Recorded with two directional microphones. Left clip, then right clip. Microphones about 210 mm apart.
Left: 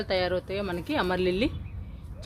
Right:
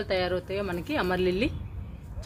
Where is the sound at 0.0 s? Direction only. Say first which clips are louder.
Left 1 dB; 30° left (ahead or behind).